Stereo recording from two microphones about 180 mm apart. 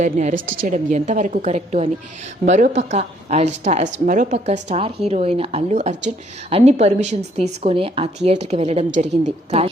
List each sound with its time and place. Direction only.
0.0 s speech: 40° right (ahead or behind)